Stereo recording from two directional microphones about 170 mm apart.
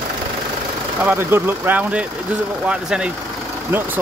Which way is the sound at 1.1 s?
15° right (ahead or behind).